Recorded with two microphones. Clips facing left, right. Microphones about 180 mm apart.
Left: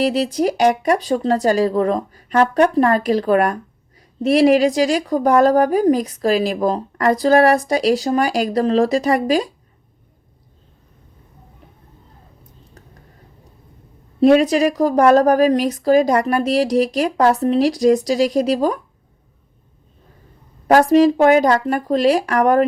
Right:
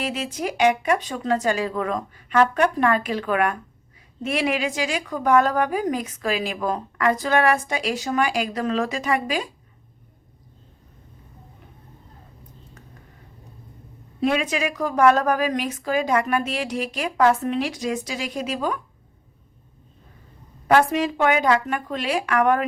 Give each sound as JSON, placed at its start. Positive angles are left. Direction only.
{"t": 0.0, "sound": "speech", "side_deg": 35}
{"t": 14.2, "sound": "speech", "side_deg": 40}
{"t": 20.7, "sound": "speech", "side_deg": 40}